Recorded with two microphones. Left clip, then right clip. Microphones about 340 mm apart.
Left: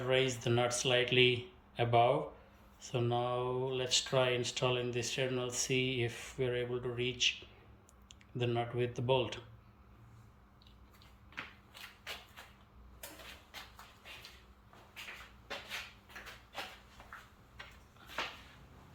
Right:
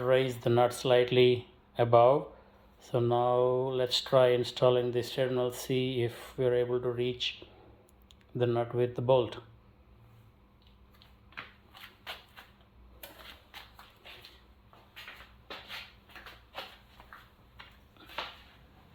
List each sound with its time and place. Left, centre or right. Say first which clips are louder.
0.0 s speech: right 5 dB; centre